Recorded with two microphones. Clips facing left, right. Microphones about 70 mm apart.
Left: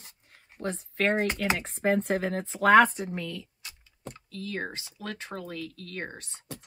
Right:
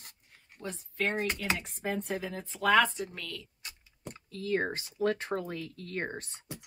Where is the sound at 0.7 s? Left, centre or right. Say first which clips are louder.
Left 5 dB; left.